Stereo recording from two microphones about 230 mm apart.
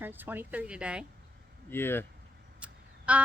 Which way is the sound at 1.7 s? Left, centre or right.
Centre.